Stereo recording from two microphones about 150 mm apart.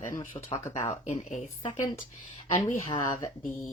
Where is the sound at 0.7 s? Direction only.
50° left (ahead or behind).